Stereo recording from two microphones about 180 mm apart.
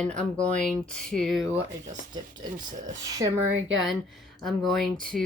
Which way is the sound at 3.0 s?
20° right (ahead or behind).